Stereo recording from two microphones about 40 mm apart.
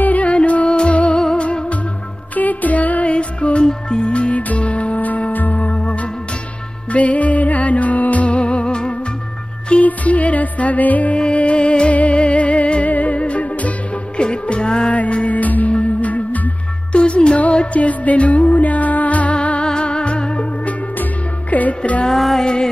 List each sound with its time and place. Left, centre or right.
0.0 s music: left
2.3 s music: left
3.1 s music: left
5.7 s music: left
6.9 s music: left
9.7 s music: left
11.1 s music: left
14.1 s music: left
16.9 s music: left
17.4 s music: left
21.0 s music: left
22.4 s music: centre